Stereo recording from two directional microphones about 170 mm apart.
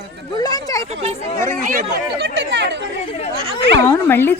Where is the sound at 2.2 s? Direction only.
90° right.